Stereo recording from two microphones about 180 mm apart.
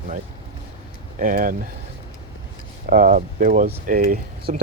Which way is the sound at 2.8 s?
50° right (ahead or behind).